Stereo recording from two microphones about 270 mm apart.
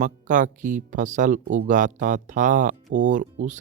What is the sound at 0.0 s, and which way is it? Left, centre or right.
Speech, right.